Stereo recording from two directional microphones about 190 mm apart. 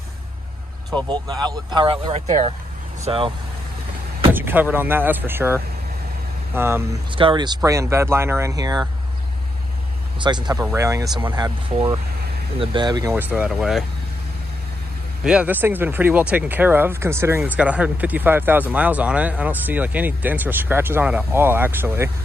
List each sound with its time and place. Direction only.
0.9 s speech: 25° right (ahead or behind)
4.3 s speech: 10° right (ahead or behind)
7.2 s speech: 25° right (ahead or behind)
10.1 s speech: 25° right (ahead or behind)
13.1 s speech: 10° right (ahead or behind)
15.2 s speech: 5° right (ahead or behind)